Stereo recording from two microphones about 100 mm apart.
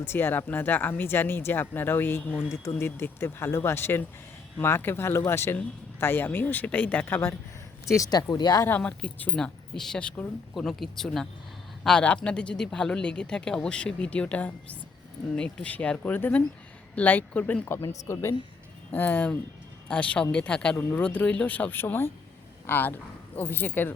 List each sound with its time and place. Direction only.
0.0 s speech: 25° left (ahead or behind)
7.9 s speech: 40° left (ahead or behind)
8.8 s speech: 10° left (ahead or behind)